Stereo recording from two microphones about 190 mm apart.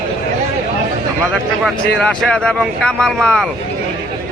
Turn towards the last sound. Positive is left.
turn(degrees=5)  # may be behind; listen again after turning